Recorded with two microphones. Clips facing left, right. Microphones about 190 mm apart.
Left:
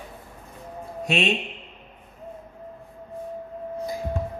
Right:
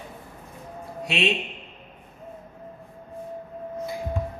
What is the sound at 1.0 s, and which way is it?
Speech, 50° left (ahead or behind).